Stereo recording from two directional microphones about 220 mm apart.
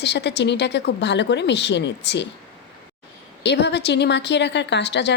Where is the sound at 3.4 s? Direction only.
50° left (ahead or behind).